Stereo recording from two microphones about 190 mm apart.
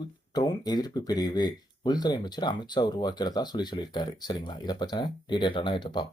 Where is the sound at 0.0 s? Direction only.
20° left (ahead or behind).